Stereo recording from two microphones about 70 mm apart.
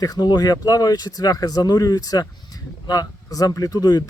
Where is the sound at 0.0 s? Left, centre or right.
Left.